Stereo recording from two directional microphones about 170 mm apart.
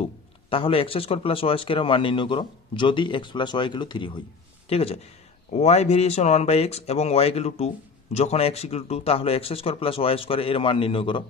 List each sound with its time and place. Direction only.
0.0 s speech: 30° left (ahead or behind)